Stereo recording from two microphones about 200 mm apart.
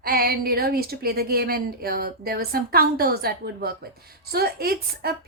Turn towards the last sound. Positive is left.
turn(degrees=-50)  # may be behind; listen again after turning